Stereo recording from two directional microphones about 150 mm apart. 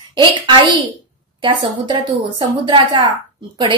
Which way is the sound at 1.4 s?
30° right (ahead or behind).